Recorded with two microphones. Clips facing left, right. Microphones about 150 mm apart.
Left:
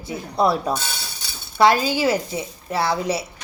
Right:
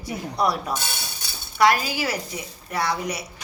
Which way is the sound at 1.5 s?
25° left (ahead or behind).